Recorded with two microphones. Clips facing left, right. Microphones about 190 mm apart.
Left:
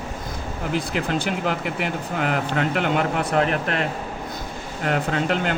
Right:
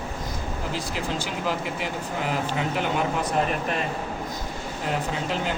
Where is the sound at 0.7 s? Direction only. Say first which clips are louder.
Left 7 dB; 60° left (ahead or behind).